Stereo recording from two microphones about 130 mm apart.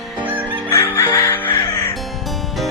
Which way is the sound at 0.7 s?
20° left (ahead or behind).